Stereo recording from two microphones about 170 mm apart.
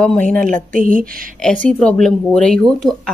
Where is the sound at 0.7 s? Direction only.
50° right (ahead or behind).